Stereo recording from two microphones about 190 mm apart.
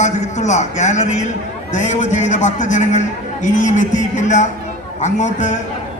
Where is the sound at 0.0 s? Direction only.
40° left (ahead or behind).